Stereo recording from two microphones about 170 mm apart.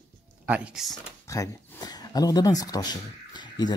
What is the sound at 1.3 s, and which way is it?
Speech, 20° left (ahead or behind).